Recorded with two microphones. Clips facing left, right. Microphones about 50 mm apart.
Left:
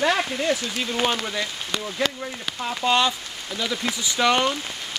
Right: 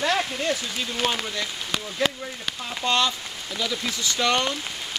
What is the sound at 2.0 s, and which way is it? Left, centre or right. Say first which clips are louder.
Speech: right 2 dB; centre.